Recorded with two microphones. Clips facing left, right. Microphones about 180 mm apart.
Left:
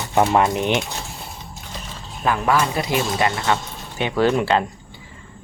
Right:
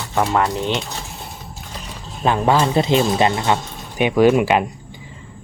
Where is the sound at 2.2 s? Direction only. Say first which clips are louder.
Right 3 dB; 25° right (ahead or behind).